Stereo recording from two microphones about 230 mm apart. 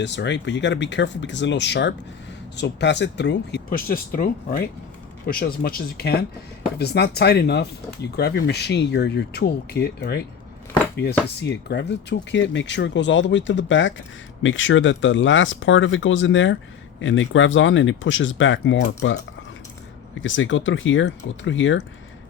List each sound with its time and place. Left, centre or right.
0.0 s speech: left
20.2 s speech: left